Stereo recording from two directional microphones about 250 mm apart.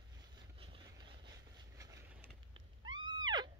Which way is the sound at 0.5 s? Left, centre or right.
Centre.